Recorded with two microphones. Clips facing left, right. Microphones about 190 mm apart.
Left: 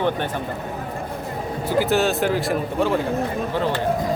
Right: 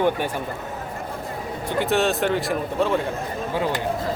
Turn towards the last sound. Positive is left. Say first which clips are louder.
# left 1 dB
turn(degrees=0)  # may be behind; listen again after turning